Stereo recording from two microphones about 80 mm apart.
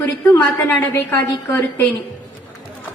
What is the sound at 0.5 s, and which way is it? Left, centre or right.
A woman's voice, left.